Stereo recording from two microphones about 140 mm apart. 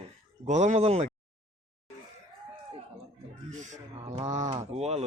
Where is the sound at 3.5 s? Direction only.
60° right (ahead or behind).